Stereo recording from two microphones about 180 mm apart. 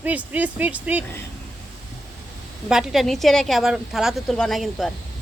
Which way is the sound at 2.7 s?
Centre (ahead or behind).